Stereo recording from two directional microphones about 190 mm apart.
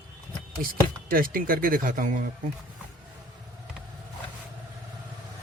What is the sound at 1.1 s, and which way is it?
Speech, 50° right (ahead or behind).